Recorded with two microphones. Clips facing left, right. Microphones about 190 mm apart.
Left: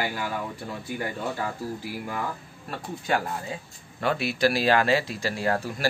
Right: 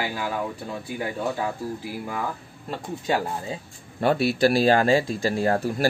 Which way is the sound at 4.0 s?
35° right (ahead or behind).